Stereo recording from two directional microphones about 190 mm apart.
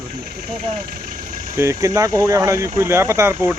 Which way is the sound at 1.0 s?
45° right (ahead or behind).